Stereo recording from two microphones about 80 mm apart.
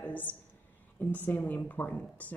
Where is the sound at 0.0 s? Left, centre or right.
Left.